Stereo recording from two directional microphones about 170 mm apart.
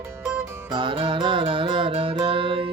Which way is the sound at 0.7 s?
30° right (ahead or behind).